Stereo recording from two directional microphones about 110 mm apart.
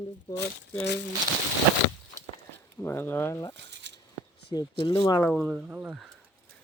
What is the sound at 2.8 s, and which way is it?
Speech, 20° left (ahead or behind).